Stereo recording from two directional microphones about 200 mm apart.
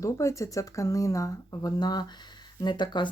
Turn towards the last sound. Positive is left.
turn(degrees=20)  # may be behind; listen again after turning